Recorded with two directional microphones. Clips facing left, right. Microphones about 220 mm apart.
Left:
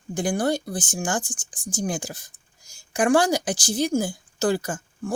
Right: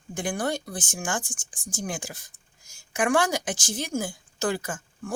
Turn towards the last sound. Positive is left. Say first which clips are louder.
# left 4 dB
turn(degrees=35)  # may be behind; listen again after turning